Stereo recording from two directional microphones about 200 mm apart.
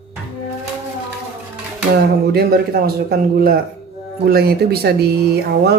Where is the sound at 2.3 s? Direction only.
50° right (ahead or behind).